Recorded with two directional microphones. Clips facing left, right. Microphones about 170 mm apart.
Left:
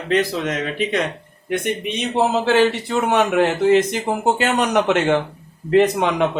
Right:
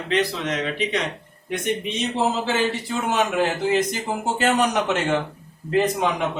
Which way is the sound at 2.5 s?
70° left (ahead or behind).